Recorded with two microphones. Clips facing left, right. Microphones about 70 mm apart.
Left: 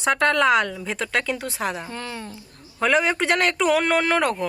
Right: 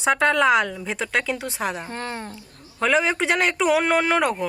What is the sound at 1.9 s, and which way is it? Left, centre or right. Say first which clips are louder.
Speech: right 2 dB; right.